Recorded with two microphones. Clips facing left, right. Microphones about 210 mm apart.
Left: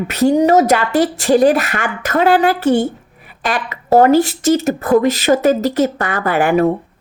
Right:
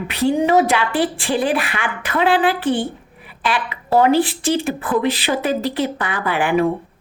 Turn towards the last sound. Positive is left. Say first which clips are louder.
# left 4 dB
turn(degrees=45)  # may be behind; listen again after turning